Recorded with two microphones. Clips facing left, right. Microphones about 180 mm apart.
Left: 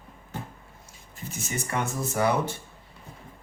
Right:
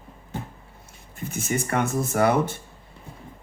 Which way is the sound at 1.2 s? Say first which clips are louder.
Right 7 dB; 55° right (ahead or behind).